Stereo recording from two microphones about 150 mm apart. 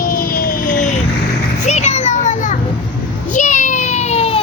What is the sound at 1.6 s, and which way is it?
Children playing, 50° left (ahead or behind).